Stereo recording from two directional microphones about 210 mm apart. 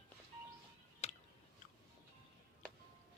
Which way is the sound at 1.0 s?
30° left (ahead or behind).